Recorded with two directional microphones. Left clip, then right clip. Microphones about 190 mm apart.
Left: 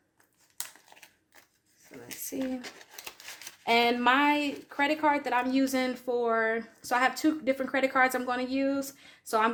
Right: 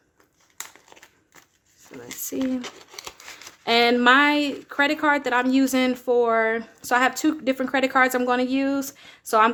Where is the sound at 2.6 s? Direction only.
20° right (ahead or behind).